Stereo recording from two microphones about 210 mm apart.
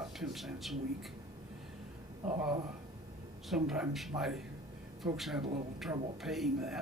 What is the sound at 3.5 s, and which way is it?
A man's voice, 5° right (ahead or behind).